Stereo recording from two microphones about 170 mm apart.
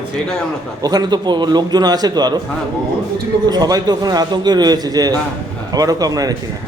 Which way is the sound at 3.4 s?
25° right (ahead or behind).